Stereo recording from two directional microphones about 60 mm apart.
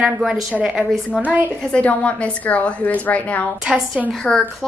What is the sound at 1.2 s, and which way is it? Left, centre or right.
Speech, right.